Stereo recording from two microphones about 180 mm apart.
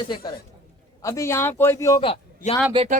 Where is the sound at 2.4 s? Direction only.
45° left (ahead or behind).